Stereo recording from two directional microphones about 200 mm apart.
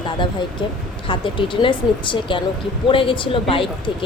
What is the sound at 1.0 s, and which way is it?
A woman's voice, 25° left (ahead or behind).